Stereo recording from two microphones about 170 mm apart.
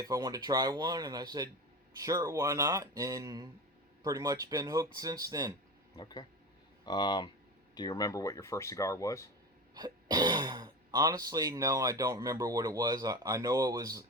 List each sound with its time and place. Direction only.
0.0 s speech: 20° right (ahead or behind)
6.0 s speech: 25° left (ahead or behind)
9.7 s speech: 25° right (ahead or behind)